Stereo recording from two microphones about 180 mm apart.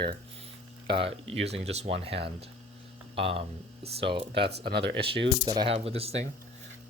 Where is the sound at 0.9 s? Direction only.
30° right (ahead or behind).